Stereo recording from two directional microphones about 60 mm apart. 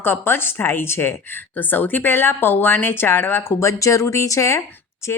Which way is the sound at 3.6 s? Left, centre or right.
Left.